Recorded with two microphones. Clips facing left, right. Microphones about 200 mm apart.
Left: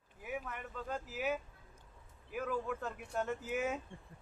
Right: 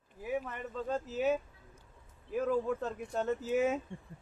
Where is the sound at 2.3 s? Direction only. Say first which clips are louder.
Right 7 dB; 30° right (ahead or behind).